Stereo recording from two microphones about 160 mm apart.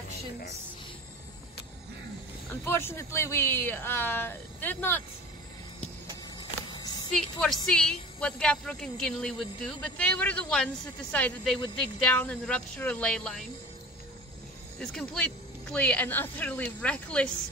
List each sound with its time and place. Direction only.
2.5 s speech: 15° left (ahead or behind)
6.7 s a sound: 25° left (ahead or behind)
7.2 s a woman's voice: 5° left (ahead or behind)
14.8 s speech: 5° left (ahead or behind)